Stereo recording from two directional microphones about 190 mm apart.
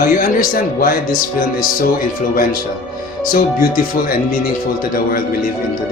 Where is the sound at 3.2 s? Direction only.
45° left (ahead or behind).